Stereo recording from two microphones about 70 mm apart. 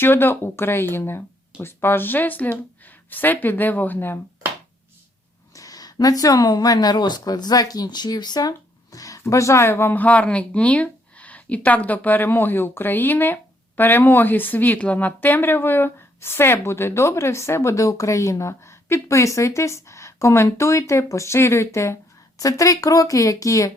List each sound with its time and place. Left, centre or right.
0.0 s speech: left
5.5 s speech: left
22.4 s speech: left